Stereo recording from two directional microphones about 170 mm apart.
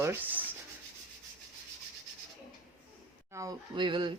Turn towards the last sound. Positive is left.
turn(degrees=-25)  # may be behind; listen again after turning